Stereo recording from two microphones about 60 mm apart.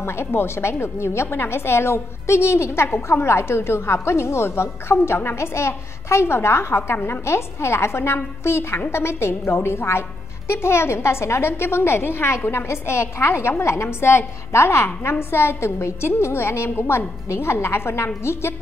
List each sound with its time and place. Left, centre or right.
0.0 s a woman's voice: left